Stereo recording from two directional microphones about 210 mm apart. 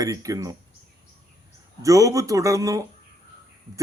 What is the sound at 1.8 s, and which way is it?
Speech, 15° right (ahead or behind).